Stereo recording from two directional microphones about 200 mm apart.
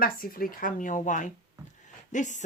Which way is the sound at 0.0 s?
45° left (ahead or behind).